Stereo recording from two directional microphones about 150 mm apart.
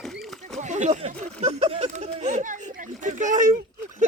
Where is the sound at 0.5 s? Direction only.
50° right (ahead or behind).